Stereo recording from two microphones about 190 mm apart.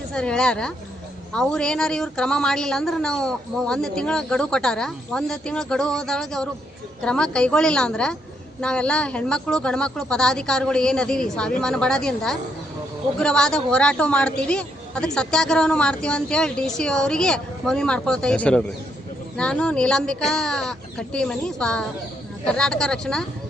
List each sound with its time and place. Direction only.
0.1 s speech: 5° left (ahead or behind)